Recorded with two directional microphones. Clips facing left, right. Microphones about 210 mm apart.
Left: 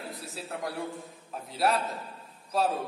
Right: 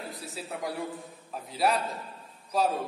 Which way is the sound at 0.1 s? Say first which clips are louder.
Even; centre (ahead or behind).